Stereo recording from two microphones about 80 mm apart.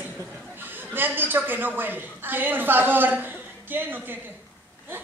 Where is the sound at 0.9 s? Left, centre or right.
Right.